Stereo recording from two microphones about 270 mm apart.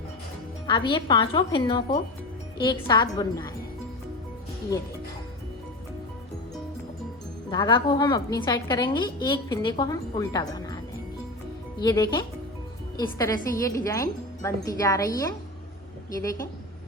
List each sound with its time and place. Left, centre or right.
0.7 s a woman's voice: centre
7.5 s a woman's voice: centre
11.8 s a woman's voice: centre